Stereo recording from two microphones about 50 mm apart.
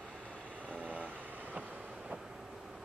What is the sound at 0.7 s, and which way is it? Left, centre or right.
Vehicle, right.